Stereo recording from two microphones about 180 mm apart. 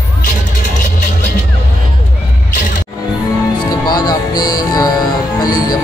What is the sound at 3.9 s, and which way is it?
Music, 25° left (ahead or behind).